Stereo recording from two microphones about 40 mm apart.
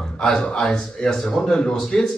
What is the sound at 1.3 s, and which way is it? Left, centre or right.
Speech, left.